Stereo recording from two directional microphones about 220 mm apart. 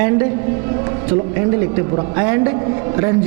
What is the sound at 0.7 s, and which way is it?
Speech, 15° right (ahead or behind).